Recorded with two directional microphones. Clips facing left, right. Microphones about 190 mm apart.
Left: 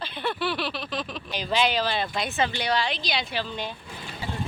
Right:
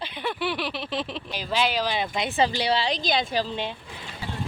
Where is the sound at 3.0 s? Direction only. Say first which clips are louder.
Right 5 dB; 45° right (ahead or behind).